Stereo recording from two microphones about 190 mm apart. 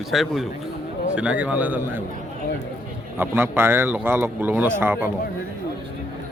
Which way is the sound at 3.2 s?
10° right (ahead or behind).